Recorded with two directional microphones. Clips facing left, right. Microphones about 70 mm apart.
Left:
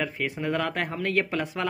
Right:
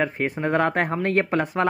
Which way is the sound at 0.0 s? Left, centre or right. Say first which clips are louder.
Right 5 dB; right.